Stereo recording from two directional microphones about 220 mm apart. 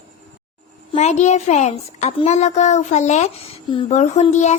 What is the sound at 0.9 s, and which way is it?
A woman's voice, 30° left (ahead or behind).